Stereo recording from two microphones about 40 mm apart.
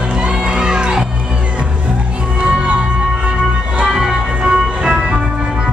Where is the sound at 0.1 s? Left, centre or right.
Right.